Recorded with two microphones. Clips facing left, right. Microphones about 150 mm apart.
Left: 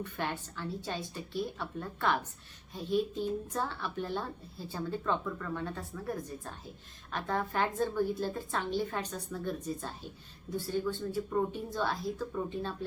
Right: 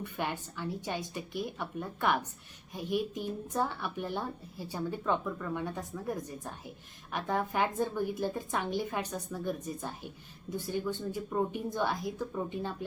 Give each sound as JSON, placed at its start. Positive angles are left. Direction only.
{"t": 0.0, "sound": "speech", "side_deg": -10}